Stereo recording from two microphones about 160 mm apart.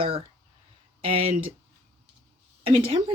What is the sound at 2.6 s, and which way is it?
Speech, 35° right (ahead or behind).